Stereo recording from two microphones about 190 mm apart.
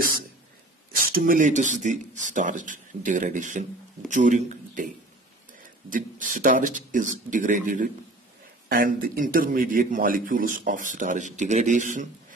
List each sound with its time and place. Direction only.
1.0 s a man's voice: 50° right (ahead or behind)
5.9 s a man's voice: 45° right (ahead or behind)